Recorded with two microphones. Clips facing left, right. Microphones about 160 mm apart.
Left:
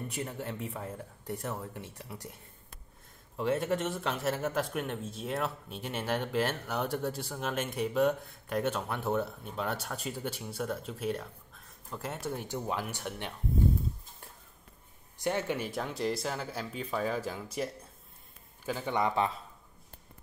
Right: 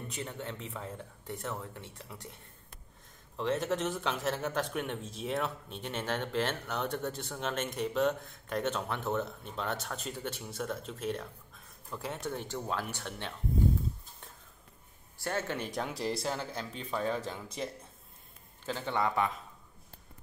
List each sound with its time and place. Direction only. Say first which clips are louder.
0.1 s speech: left 2 dB; 10° left (ahead or behind)
3.3 s speech: left 2 dB; 5° left (ahead or behind)
15.1 s speech: left 3 dB; 15° left (ahead or behind)
18.7 s speech: left 1 dB; 10° left (ahead or behind)